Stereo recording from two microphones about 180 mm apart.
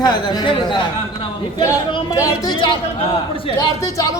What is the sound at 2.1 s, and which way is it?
Speech, 20° left (ahead or behind).